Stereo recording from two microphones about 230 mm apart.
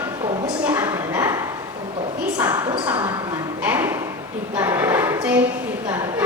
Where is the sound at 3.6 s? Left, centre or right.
Centre.